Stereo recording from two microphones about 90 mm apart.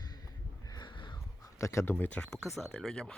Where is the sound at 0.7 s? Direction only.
55° left (ahead or behind).